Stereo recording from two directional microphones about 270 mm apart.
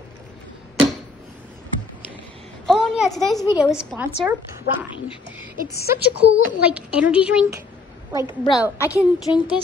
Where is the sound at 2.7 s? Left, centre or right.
Centre.